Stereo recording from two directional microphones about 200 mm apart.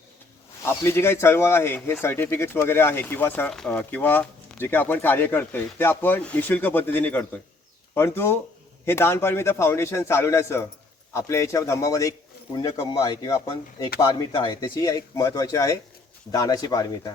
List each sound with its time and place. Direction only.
0.6 s speech: 10° left (ahead or behind)